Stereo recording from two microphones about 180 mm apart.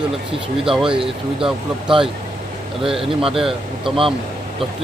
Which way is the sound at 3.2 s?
Centre (ahead or behind).